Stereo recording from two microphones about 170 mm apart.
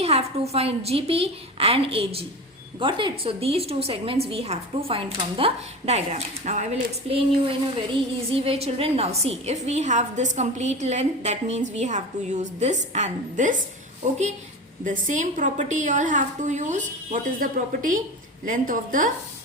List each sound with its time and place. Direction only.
0.0 s a woman's voice: 40° right (ahead or behind)
7.1 s a woman's voice: 35° right (ahead or behind); by 19.1 s 50° right (ahead or behind)